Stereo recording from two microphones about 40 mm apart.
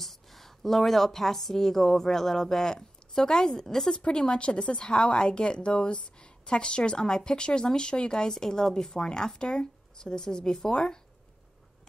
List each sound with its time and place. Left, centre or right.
0.0 s a woman's voice: centre
4.0 s a woman's voice: left